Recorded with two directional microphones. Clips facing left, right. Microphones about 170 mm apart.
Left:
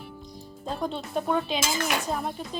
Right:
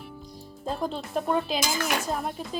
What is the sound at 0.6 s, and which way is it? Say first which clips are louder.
Speech: right 1 dB; centre (ahead or behind).